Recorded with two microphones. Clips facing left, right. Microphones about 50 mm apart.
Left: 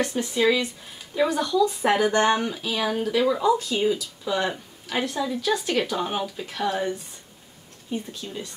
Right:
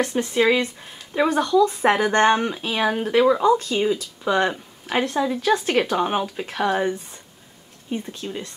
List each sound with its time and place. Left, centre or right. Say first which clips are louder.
0.0 s a woman's voice: right 3 dB; right
3.5 s a woman's voice: right 2 dB; right